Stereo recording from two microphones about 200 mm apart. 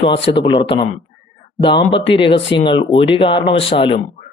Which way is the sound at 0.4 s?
25° left (ahead or behind).